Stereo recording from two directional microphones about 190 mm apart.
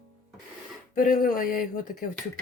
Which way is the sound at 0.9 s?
50° left (ahead or behind).